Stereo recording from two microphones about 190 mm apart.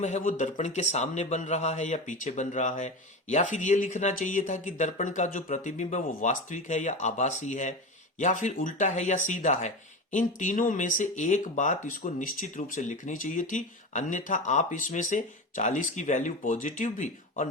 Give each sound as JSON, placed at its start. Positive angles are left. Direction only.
{"t": 0.0, "sound": "speech", "side_deg": 40}